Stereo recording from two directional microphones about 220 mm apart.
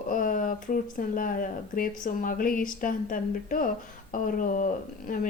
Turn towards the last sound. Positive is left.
turn(degrees=35)  # may be behind; listen again after turning